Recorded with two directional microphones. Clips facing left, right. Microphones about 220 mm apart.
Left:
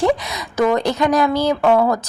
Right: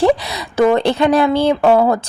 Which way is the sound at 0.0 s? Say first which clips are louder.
Right 4 dB; 35° right (ahead or behind).